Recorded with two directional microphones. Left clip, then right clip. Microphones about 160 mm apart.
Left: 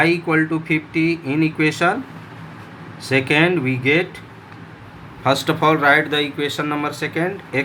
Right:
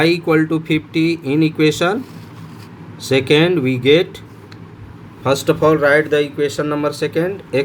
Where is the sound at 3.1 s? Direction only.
45° right (ahead or behind).